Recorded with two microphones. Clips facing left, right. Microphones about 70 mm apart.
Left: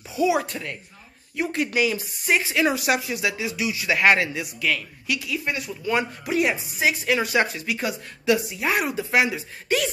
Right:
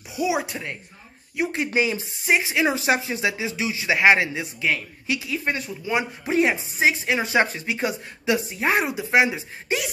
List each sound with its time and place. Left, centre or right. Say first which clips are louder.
0.1 s speech: left 2 dB; centre